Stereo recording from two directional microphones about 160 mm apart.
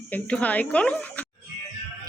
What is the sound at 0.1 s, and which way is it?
Speech, 10° left (ahead or behind).